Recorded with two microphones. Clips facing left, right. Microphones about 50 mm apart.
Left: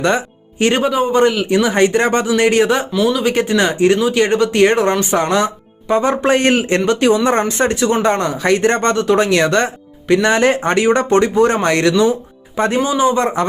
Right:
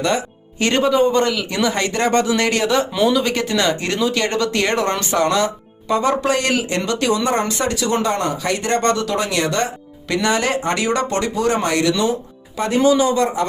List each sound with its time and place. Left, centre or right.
0.0 s speech: left
0.6 s speech: left
3.1 s speech: centre
3.3 s speech: left
12.8 s speech: left